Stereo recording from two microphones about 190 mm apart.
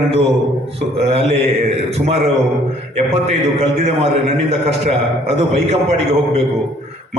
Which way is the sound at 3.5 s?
35° right (ahead or behind).